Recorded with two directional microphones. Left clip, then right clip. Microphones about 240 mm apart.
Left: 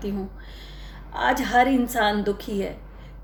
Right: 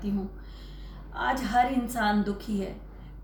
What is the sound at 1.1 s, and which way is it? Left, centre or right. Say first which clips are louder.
A woman's voice: left 5 dB; left.